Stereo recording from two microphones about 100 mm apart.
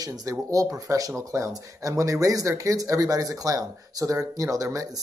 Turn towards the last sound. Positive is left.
turn(degrees=-35)  # may be behind; listen again after turning